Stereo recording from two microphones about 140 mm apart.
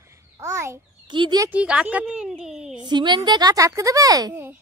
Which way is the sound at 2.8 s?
30° right (ahead or behind).